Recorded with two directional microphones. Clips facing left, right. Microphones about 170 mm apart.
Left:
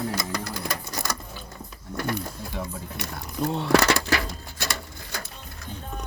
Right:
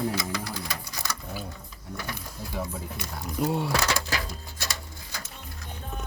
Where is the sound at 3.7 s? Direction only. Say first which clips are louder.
Left 7 dB; 70° left (ahead or behind).